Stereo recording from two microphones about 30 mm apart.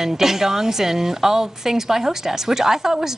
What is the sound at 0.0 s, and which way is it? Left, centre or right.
A woman's voice, centre.